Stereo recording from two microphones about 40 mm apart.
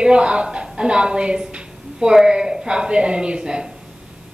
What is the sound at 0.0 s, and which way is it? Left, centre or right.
A woman's voice, right.